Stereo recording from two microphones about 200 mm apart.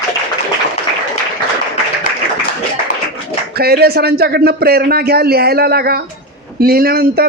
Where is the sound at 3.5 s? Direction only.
50° right (ahead or behind).